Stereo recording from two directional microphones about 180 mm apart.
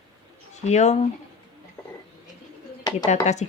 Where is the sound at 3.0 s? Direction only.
40° left (ahead or behind).